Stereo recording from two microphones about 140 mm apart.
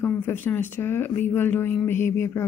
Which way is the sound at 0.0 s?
15° left (ahead or behind).